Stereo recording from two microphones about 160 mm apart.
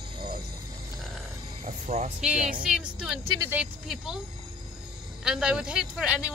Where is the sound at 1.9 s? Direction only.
50° right (ahead or behind).